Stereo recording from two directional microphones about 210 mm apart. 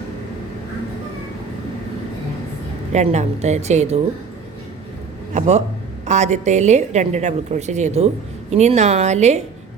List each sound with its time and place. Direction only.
2.9 s a woman's voice: 35° right (ahead or behind)
5.3 s a woman's voice: 30° right (ahead or behind)